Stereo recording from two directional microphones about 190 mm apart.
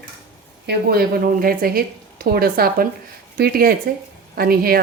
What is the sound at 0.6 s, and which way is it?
A woman's voice, 55° right (ahead or behind).